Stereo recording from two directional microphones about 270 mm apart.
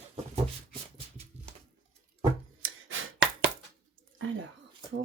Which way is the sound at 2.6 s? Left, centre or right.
Right.